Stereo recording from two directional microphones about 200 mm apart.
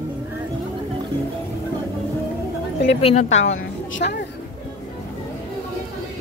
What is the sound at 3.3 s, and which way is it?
Speech, 65° left (ahead or behind).